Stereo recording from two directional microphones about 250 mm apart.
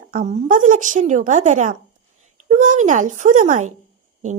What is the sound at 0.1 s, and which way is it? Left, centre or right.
A woman's voice, right.